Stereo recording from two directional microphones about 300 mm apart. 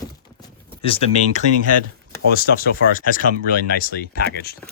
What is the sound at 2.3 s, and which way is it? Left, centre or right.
Speech, left.